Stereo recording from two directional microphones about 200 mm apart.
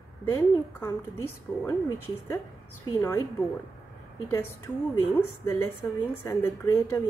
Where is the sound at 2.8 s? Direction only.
15° left (ahead or behind).